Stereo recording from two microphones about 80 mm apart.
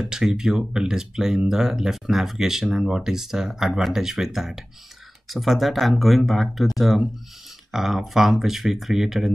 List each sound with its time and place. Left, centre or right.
0.0 s speech: centre